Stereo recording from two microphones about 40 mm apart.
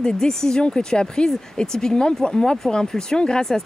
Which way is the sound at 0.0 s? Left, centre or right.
Centre.